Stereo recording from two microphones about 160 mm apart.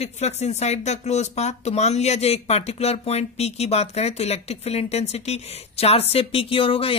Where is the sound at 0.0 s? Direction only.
45° left (ahead or behind).